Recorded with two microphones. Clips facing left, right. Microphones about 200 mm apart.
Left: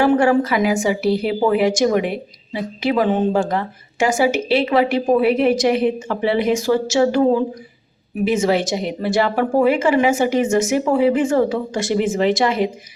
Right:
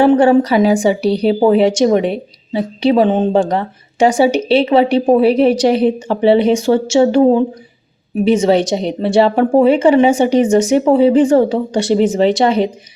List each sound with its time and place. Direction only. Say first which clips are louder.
0.0 s a woman's voice: right 5 dB; 30° right (ahead or behind)